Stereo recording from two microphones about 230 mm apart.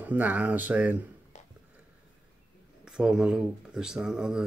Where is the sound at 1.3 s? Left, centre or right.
Left.